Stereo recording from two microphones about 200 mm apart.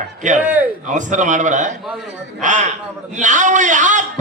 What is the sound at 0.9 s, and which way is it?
A man's voice, 40° right (ahead or behind).